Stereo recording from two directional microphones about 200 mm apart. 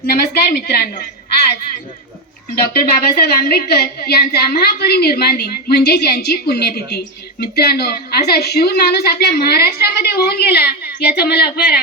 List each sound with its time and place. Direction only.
0.1 s a woman's voice: 50° left (ahead or behind)
2.7 s a woman's voice: 50° left (ahead or behind)